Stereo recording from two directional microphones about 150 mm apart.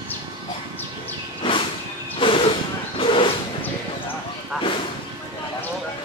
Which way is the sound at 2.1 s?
35° left (ahead or behind).